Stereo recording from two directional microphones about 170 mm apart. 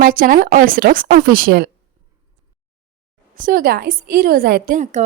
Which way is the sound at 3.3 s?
55° right (ahead or behind).